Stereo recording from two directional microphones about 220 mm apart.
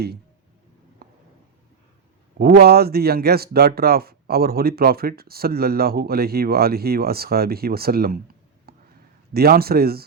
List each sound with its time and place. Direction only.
2.4 s a man's voice: 45° right (ahead or behind)
8.7 s a sound: 45° right (ahead or behind)
9.3 s a man's voice: 45° right (ahead or behind)